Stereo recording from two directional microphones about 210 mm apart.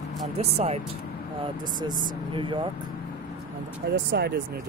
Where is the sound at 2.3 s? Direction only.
25° right (ahead or behind).